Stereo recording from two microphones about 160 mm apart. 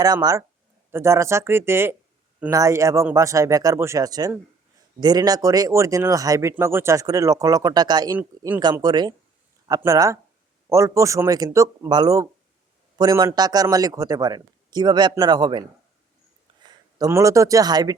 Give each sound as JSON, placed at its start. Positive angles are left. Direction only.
{"t": 0.0, "sound": "a man's voice", "side_deg": -25}
{"t": 8.2, "sound": "speech", "side_deg": -10}
{"t": 8.8, "sound": "a man's voice", "side_deg": -25}
{"t": 17.0, "sound": "a man's voice", "side_deg": -20}